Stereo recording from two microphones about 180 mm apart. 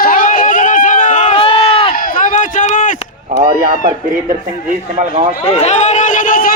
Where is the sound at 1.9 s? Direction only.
50° left (ahead or behind).